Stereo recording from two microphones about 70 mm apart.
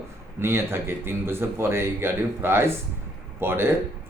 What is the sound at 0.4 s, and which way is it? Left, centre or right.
Speech, right.